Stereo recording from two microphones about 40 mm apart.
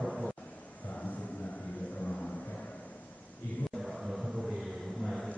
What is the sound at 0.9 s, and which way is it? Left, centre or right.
Vehicle, left.